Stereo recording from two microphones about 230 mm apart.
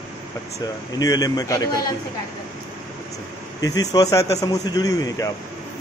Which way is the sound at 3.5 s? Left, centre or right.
Centre.